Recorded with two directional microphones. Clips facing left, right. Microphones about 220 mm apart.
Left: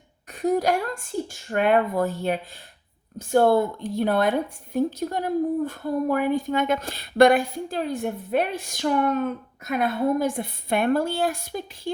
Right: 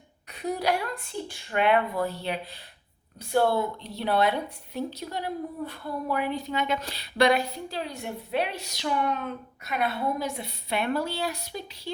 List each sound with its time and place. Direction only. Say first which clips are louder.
0.3 s a woman's voice: left 6 dB; 45° left (ahead or behind)